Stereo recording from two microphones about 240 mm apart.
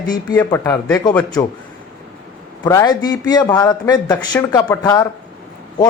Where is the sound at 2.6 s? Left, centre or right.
Centre.